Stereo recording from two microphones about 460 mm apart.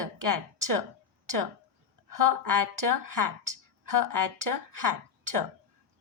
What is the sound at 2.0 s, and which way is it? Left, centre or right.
Speech, right.